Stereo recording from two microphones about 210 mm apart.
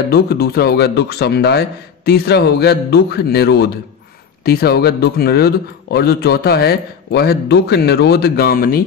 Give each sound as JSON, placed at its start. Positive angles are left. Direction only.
{"t": 0.1, "sound": "a man's voice", "side_deg": 50}